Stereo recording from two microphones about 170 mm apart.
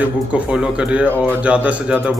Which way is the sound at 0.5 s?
5° right (ahead or behind).